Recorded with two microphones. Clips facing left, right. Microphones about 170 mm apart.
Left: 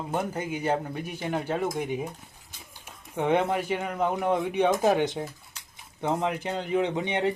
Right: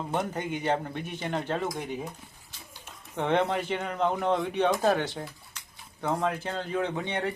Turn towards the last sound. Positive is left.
turn(degrees=20)  # may be behind; listen again after turning